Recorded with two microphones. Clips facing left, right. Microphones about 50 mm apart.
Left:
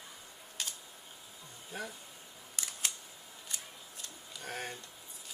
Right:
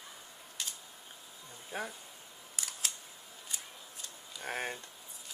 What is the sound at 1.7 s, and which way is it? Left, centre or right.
Speech, right.